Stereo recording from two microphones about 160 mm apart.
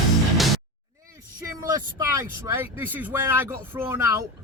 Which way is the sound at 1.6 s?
20° right (ahead or behind).